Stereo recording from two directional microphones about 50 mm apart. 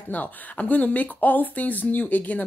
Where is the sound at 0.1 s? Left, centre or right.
Left.